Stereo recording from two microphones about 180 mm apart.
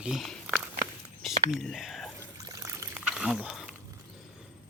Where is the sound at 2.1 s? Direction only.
15° right (ahead or behind).